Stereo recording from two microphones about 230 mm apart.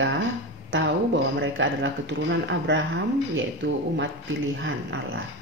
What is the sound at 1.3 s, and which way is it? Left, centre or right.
Speech, right.